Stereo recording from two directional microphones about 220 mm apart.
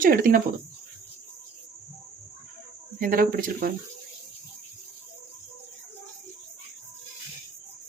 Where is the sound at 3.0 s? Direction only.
40° right (ahead or behind).